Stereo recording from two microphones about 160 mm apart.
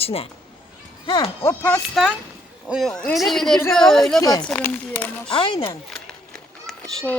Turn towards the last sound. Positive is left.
turn(degrees=5)  # may be behind; listen again after turning